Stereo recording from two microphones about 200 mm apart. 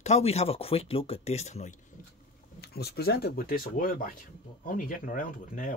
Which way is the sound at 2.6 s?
50° left (ahead or behind).